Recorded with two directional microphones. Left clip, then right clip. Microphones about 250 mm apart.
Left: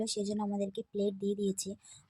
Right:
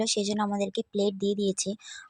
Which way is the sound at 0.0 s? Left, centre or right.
Centre.